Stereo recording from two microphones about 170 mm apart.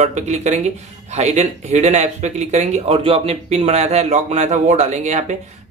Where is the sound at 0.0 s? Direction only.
45° right (ahead or behind).